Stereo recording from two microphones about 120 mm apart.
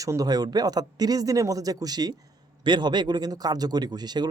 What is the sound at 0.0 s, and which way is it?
Speech, 30° right (ahead or behind).